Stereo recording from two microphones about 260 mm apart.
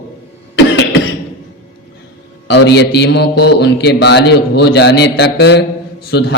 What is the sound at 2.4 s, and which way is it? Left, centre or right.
A man's voice, left.